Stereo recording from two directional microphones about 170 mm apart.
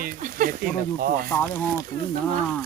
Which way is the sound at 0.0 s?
55° right (ahead or behind).